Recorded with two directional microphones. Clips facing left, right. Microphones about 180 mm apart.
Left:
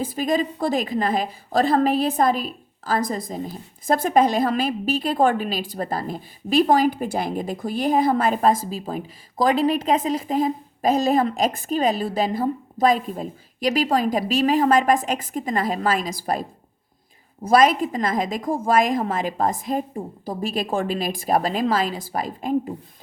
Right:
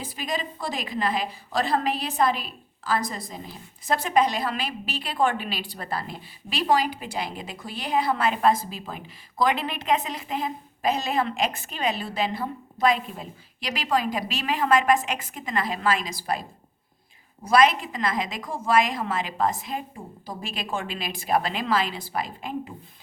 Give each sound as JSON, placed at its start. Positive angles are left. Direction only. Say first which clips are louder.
{"t": 0.0, "sound": "a woman's voice", "louder": "left 9 dB", "side_deg": 50}
{"t": 17.5, "sound": "a woman's voice", "louder": "left 3 dB", "side_deg": 45}